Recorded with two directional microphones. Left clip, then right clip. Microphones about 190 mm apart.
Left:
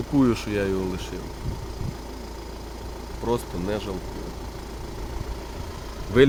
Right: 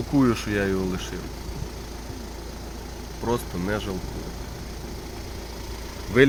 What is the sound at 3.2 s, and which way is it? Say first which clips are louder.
Speech: even; centre (ahead or behind).